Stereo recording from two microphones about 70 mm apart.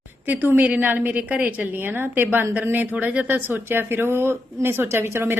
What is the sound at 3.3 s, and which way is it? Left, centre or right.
Speech, right.